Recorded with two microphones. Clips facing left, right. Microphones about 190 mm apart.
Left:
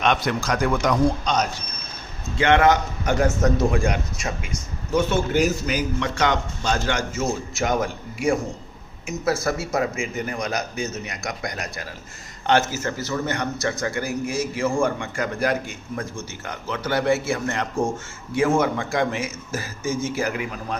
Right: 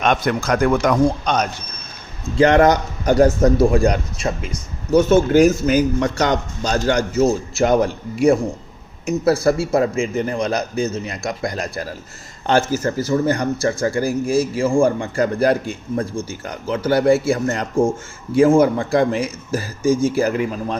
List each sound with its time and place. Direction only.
0.0 s a man's voice: 50° right (ahead or behind)
2.4 s a man's voice: 40° right (ahead or behind)
9.0 s a man's voice: 35° right (ahead or behind)